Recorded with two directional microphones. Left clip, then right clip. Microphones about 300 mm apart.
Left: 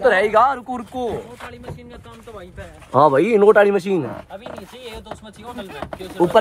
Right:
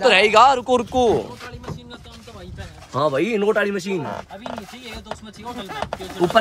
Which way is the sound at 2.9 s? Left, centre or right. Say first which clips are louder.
Left 6 dB; centre.